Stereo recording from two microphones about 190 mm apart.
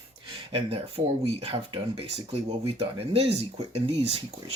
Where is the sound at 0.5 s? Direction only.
30° right (ahead or behind).